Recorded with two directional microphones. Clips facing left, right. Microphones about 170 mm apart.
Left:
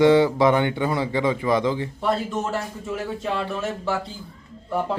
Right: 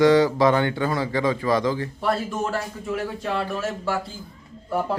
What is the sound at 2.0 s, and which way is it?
A man's voice, centre (ahead or behind).